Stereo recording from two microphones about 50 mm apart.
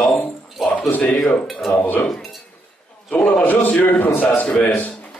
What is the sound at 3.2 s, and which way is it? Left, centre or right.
A man's voice, left.